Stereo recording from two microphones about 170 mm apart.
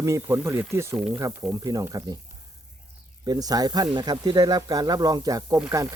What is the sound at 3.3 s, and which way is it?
Speech, 20° right (ahead or behind).